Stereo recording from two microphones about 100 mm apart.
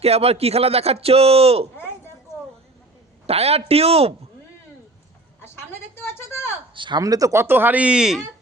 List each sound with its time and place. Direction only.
0.0 s a man's voice: 90° right
3.2 s a man's voice: 90° right
5.5 s a woman's voice: 25° left (ahead or behind)
6.7 s speech: 55° right (ahead or behind)
7.0 s speech: 35° right (ahead or behind); by 8.2 s 5° right (ahead or behind)